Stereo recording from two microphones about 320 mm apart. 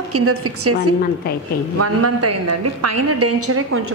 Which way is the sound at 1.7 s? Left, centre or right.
Right.